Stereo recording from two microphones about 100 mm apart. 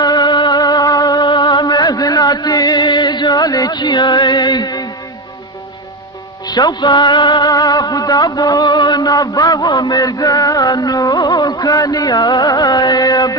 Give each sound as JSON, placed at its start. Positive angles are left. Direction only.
{"t": 0.0, "sound": "music", "side_deg": 45}
{"t": 6.4, "sound": "music", "side_deg": 45}